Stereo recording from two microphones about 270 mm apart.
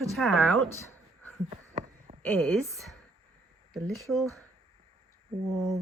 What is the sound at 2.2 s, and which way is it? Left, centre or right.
Speech, centre.